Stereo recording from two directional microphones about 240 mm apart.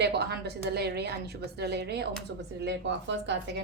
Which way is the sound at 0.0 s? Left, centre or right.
Right.